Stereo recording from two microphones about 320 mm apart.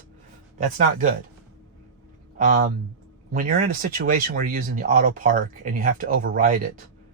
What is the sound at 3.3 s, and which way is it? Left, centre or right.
Speech, right.